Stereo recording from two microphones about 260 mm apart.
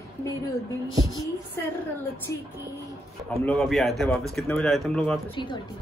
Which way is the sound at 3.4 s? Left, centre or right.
Centre.